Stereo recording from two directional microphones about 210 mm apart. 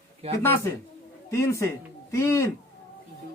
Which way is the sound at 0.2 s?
30° right (ahead or behind).